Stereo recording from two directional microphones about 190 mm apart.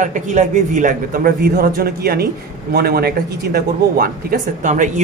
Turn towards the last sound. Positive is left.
turn(degrees=-40)  # may be behind; listen again after turning